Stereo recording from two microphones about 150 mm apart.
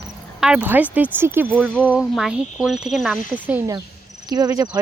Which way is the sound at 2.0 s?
Centre (ahead or behind).